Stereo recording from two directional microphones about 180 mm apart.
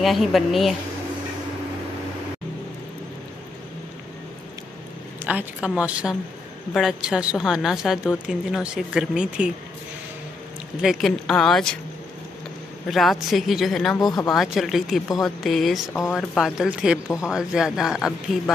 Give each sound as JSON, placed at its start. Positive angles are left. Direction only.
{"t": 0.0, "sound": "a woman's voice", "side_deg": 0}
{"t": 5.2, "sound": "a woman's voice", "side_deg": -10}
{"t": 10.8, "sound": "a woman's voice", "side_deg": 0}
{"t": 12.8, "sound": "a woman's voice", "side_deg": 0}
{"t": 13.9, "sound": "speech", "side_deg": 20}
{"t": 14.3, "sound": "a woman's voice", "side_deg": 0}